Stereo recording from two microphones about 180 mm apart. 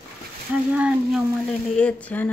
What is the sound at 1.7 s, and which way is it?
Speech, 5° left (ahead or behind).